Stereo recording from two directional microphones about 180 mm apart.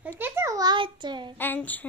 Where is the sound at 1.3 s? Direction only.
10° left (ahead or behind).